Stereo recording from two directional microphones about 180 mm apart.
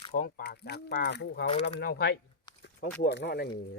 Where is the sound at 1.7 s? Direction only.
65° left (ahead or behind).